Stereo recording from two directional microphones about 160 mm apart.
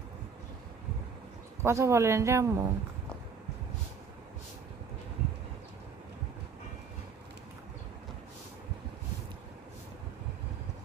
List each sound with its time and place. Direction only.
1.6 s speech: 15° right (ahead or behind)